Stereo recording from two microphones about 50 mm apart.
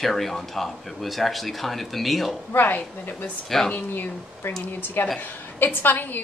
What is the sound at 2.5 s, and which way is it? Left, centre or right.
Speech, left.